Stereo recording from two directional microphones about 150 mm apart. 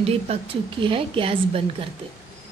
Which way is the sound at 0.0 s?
40° right (ahead or behind).